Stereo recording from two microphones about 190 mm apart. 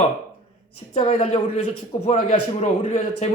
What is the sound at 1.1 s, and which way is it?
A man's voice, 30° left (ahead or behind).